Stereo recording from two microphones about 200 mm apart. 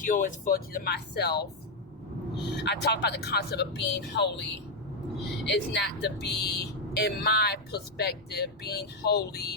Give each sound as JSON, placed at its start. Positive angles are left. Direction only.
{"t": 0.0, "sound": "speech", "side_deg": 40}
{"t": 5.5, "sound": "speech", "side_deg": 60}